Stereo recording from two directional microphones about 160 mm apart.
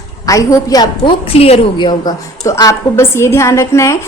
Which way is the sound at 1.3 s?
40° left (ahead or behind).